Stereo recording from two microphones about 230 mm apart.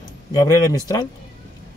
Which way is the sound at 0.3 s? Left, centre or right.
Centre.